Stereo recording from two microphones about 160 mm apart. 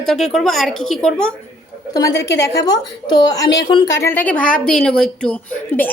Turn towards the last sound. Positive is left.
turn(degrees=10)  # may be behind; listen again after turning